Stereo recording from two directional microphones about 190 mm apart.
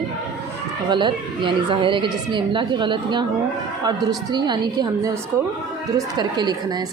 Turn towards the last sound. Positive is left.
turn(degrees=-20)  # may be behind; listen again after turning